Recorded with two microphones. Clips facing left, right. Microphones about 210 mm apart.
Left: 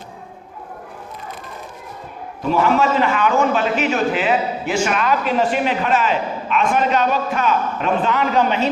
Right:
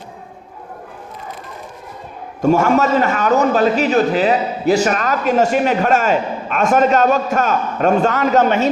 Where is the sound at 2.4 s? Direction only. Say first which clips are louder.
Right 3 dB; 45° right (ahead or behind).